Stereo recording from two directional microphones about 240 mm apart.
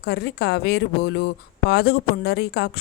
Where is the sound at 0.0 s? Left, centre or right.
Left.